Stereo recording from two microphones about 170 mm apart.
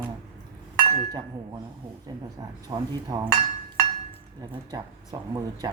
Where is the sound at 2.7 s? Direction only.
20° right (ahead or behind).